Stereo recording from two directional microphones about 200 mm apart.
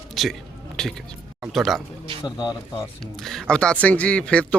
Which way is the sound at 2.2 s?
15° left (ahead or behind).